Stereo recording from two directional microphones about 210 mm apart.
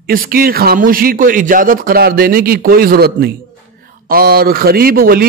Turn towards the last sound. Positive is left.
turn(degrees=-45)  # may be behind; listen again after turning